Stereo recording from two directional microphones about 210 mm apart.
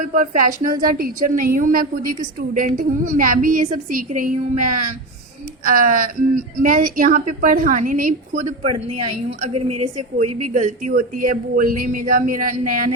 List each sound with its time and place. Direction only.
0.0 s speech: 40° right (ahead or behind)